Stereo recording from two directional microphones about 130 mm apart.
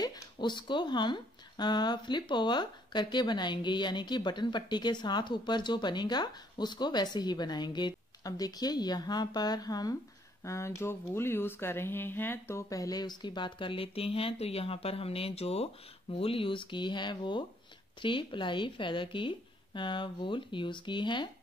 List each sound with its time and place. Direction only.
0.0 s speech: 35° left (ahead or behind)